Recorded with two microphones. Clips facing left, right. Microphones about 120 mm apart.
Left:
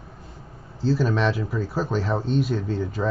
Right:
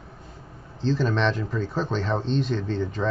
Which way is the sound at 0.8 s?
5° left (ahead or behind).